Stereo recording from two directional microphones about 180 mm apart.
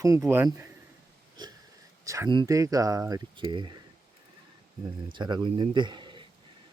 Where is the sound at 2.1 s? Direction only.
20° right (ahead or behind).